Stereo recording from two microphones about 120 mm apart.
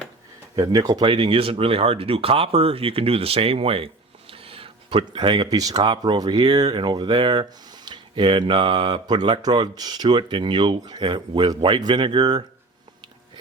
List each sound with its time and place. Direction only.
0.5 s speech: 35° right (ahead or behind)